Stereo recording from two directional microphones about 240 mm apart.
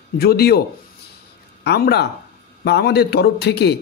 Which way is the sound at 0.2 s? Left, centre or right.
Left.